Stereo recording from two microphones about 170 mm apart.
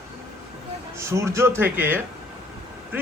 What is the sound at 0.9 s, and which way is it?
Speech, 15° right (ahead or behind).